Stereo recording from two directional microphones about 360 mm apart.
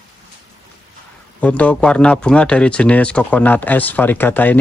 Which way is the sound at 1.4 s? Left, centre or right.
Centre.